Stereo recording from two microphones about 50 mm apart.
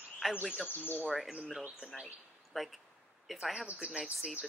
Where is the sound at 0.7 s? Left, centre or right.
Left.